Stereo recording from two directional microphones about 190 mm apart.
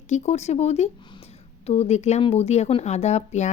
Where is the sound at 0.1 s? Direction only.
35° left (ahead or behind).